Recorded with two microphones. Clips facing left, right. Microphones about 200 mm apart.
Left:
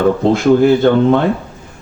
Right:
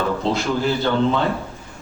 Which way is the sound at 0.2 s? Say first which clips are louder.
Left 11 dB; 55° left (ahead or behind).